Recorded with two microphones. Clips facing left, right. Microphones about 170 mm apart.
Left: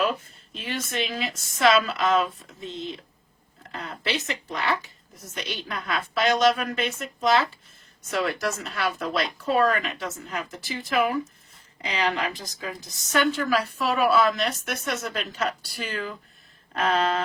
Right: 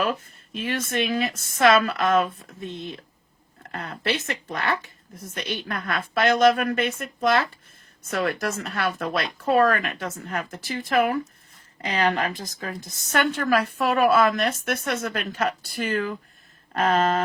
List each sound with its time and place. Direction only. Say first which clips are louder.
0.5 s a woman's voice: right 4 dB; 55° right (ahead or behind)
11.8 s speech: right 3 dB; 50° right (ahead or behind)